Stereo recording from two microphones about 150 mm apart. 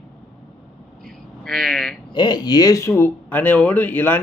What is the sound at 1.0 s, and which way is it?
Bleat, 5° left (ahead or behind).